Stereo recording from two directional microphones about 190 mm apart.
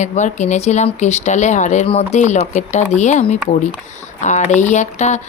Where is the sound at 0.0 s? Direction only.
40° left (ahead or behind).